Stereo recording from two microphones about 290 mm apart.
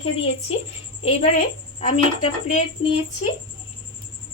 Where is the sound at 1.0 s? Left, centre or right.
Left.